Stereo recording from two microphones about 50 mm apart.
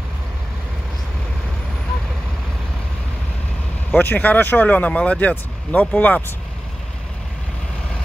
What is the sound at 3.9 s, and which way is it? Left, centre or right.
Speech, left.